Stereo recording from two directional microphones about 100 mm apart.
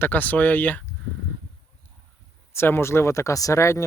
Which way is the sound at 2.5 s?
25° left (ahead or behind).